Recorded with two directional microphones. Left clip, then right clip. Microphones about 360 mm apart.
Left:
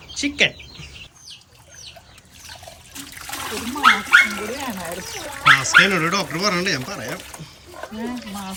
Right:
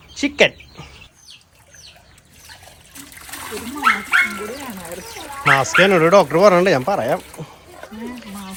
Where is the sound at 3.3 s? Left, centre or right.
Centre.